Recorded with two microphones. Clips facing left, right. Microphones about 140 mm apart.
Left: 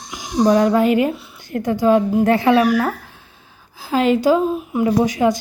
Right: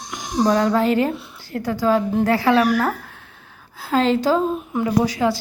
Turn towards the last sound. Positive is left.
turn(degrees=20)  # may be behind; listen again after turning